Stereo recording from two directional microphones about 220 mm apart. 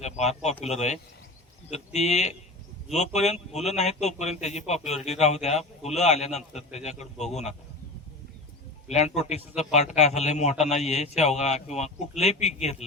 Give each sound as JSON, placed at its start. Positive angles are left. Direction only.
{"t": 0.0, "sound": "a man's voice", "side_deg": 30}
{"t": 8.9, "sound": "a man's voice", "side_deg": 30}